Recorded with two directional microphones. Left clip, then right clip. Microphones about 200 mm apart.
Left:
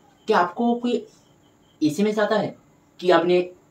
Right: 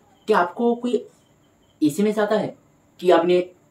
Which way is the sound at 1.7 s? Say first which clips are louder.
Right 1 dB; 15° right (ahead or behind).